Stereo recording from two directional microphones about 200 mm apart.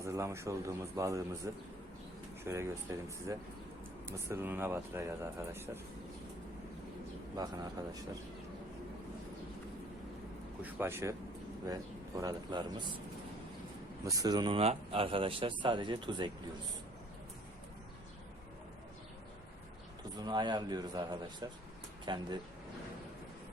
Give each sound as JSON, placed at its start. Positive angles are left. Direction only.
{"t": 0.0, "sound": "speech", "side_deg": -15}
{"t": 2.4, "sound": "speech", "side_deg": -15}
{"t": 7.3, "sound": "speech", "side_deg": -20}
{"t": 10.6, "sound": "speech", "side_deg": -10}
{"t": 12.2, "sound": "speech", "side_deg": -20}
{"t": 14.0, "sound": "speech", "side_deg": -15}
{"t": 20.1, "sound": "speech", "side_deg": -20}